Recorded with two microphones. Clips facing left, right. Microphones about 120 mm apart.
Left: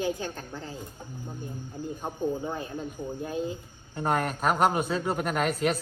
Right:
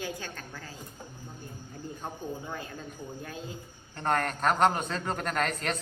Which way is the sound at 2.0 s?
20° left (ahead or behind).